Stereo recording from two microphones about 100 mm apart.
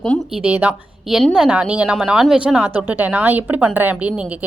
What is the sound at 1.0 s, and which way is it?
A woman's voice, 5° right (ahead or behind).